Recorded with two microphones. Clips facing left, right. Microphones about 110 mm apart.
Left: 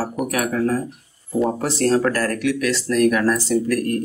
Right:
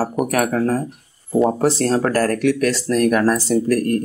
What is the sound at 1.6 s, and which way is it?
Speech, 35° right (ahead or behind).